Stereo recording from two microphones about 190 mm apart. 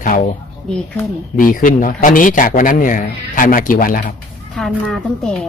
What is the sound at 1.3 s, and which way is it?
Speech, 45° left (ahead or behind).